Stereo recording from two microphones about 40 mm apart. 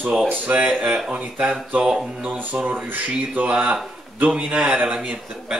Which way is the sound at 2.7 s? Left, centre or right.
Right.